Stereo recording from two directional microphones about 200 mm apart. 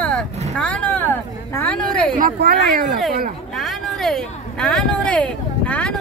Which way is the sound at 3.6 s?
Centre (ahead or behind).